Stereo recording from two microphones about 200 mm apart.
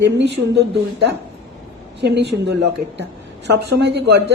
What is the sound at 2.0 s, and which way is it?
Speech, 55° right (ahead or behind).